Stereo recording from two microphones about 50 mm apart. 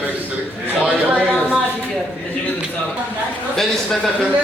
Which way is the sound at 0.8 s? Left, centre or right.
Right.